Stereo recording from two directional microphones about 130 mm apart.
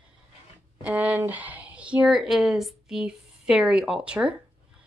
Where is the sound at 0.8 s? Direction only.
10° right (ahead or behind).